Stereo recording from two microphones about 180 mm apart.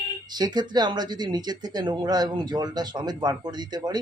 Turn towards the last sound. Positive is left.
turn(degrees=-20)  # may be behind; listen again after turning